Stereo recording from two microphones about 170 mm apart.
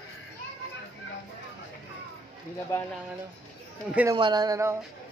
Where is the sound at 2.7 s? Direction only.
15° left (ahead or behind).